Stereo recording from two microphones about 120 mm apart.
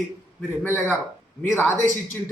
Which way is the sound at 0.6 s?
20° left (ahead or behind).